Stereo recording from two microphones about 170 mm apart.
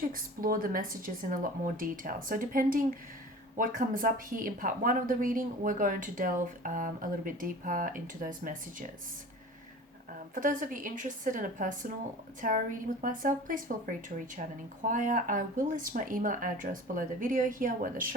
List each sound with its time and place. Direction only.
0.1 s speech: 55° right (ahead or behind)
10.3 s speech: 50° right (ahead or behind)